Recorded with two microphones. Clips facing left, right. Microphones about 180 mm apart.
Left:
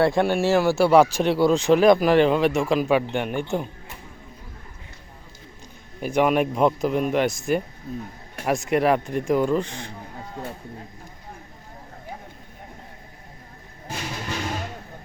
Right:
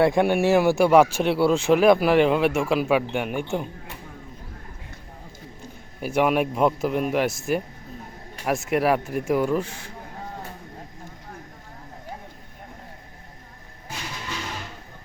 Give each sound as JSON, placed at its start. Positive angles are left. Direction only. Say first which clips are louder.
{"t": 0.0, "sound": "speech", "louder": "right 1 dB", "side_deg": -15}
{"t": 6.0, "sound": "speech", "louder": "left 1 dB", "side_deg": -5}